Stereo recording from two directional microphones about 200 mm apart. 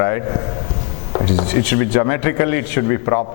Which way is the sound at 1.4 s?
15° left (ahead or behind).